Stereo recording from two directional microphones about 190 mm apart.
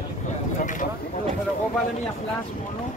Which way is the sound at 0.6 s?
40° left (ahead or behind).